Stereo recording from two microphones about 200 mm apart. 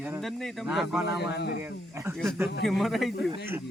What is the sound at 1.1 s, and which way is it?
Speech, 55° left (ahead or behind).